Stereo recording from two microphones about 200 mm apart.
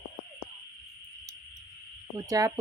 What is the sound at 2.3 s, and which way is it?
Speech, 15° right (ahead or behind).